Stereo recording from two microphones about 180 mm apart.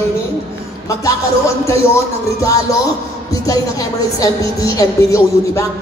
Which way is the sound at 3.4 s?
20° left (ahead or behind).